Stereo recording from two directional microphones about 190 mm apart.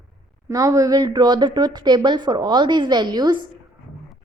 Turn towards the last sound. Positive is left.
turn(degrees=-25)  # may be behind; listen again after turning